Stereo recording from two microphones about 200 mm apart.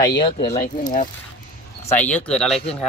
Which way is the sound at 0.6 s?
40° left (ahead or behind).